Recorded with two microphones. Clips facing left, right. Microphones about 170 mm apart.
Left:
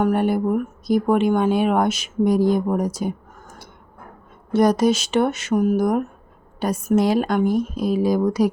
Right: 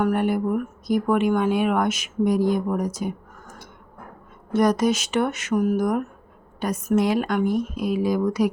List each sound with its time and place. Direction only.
0.0 s speech: 30° left (ahead or behind)
4.5 s speech: 30° left (ahead or behind)